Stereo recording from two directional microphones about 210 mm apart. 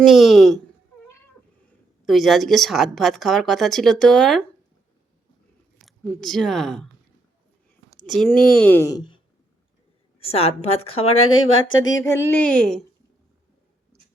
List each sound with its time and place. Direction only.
0.1 s a woman's voice: centre (ahead or behind)
2.0 s a woman's voice: centre (ahead or behind)
5.8 s speech: centre (ahead or behind)
8.0 s a woman's voice: centre (ahead or behind); by 10.8 s 30° left (ahead or behind)
11.1 s speech: 75° left (ahead or behind)
11.9 s speech: 15° left (ahead or behind)